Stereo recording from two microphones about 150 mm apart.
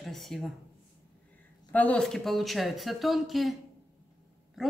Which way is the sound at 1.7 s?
10° left (ahead or behind).